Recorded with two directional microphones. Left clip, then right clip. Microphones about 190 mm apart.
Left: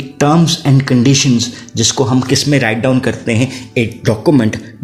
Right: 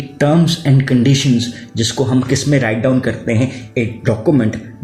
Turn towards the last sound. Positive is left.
turn(degrees=40)  # may be behind; listen again after turning